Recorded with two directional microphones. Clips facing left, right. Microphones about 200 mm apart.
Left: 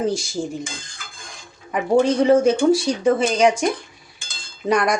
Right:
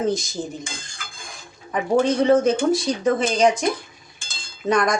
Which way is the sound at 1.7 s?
10° left (ahead or behind).